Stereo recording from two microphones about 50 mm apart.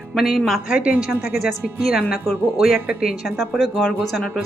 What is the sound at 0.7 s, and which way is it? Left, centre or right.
Speech, right.